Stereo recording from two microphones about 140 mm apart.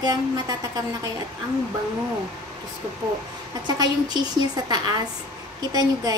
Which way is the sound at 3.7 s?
30° right (ahead or behind).